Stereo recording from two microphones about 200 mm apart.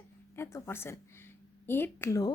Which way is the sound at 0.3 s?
15° left (ahead or behind).